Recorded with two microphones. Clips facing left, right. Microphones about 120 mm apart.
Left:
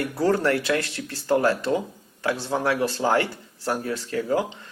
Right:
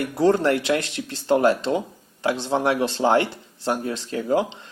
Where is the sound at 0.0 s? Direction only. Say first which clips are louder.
Right 3 dB; 20° right (ahead or behind).